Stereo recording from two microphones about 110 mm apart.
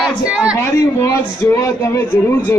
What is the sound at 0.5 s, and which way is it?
Speech, 25° left (ahead or behind).